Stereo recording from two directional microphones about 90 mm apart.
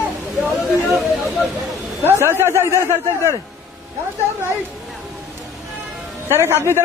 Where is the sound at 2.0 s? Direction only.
25° right (ahead or behind).